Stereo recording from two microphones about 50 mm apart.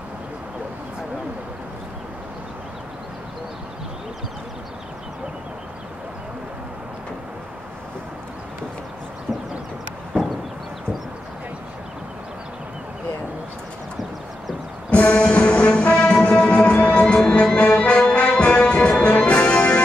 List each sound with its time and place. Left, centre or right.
14.9 s music: left
17.0 s music: centre